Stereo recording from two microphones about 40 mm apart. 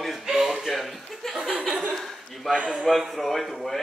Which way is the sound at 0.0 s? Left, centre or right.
Centre.